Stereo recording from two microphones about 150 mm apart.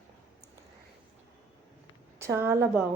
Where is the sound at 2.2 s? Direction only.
20° right (ahead or behind).